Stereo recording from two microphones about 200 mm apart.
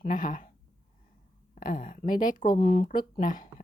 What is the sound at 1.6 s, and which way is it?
Speech, 40° left (ahead or behind).